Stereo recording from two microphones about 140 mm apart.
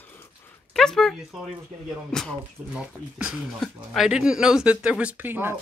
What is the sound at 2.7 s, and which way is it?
Speech, 5° right (ahead or behind).